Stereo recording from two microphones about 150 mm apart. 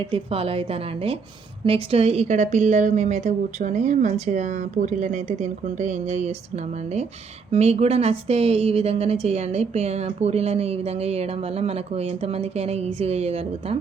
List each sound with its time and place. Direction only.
0.0 s a woman's voice: 40° right (ahead or behind)
7.5 s a woman's voice: 45° right (ahead or behind)